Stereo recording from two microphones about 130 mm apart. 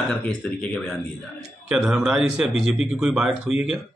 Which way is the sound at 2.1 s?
5° right (ahead or behind).